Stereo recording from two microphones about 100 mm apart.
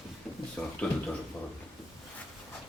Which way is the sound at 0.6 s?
15° left (ahead or behind).